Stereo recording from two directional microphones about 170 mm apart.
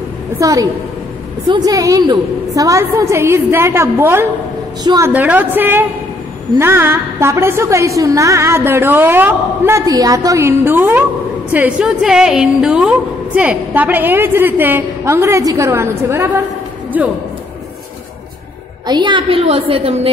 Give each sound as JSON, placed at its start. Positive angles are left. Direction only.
{"t": 0.4, "sound": "a woman's voice", "side_deg": -20}
{"t": 5.1, "sound": "a woman's voice", "side_deg": -10}
{"t": 16.9, "sound": "a woman's voice", "side_deg": -10}
{"t": 18.9, "sound": "a woman's voice", "side_deg": -25}